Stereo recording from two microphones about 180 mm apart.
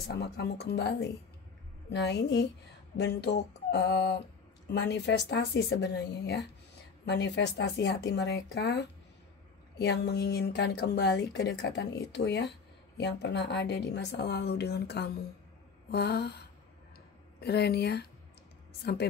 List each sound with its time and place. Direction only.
0.0 s a woman's voice: 70° left (ahead or behind)